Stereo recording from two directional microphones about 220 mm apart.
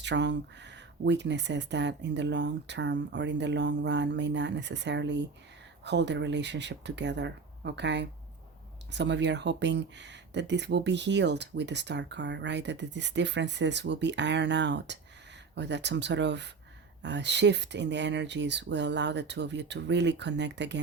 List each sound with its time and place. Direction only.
0.0 s speech: 50° right (ahead or behind)